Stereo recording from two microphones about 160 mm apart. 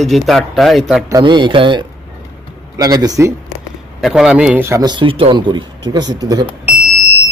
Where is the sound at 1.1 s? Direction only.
25° right (ahead or behind).